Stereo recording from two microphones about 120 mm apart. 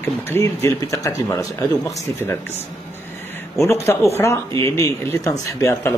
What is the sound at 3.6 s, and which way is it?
Speech, 20° left (ahead or behind).